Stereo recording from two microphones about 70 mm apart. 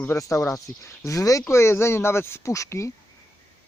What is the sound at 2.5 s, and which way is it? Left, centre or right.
Speech, left.